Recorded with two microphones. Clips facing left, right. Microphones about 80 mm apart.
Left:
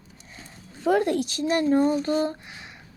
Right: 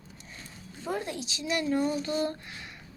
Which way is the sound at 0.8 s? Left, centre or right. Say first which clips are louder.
Left 12 dB; left.